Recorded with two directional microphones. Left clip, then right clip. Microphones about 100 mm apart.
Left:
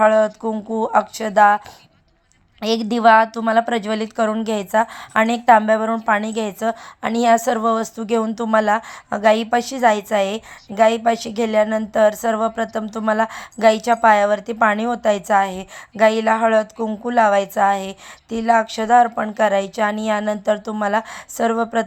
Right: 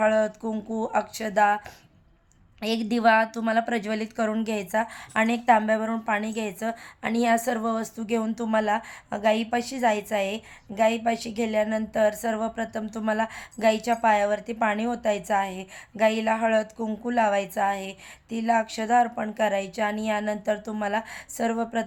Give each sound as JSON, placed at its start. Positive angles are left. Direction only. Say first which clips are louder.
{"t": 0.0, "sound": "a woman's voice", "louder": "left 8 dB", "side_deg": 25}